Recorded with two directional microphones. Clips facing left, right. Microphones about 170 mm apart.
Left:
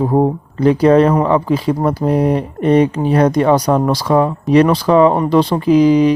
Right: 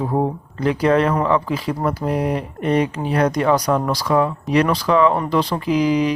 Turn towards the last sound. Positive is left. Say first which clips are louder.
# left 7 dB
turn(degrees=30)  # may be behind; listen again after turning